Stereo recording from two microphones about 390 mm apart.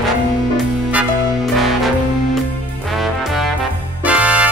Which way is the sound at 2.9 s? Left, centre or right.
Centre.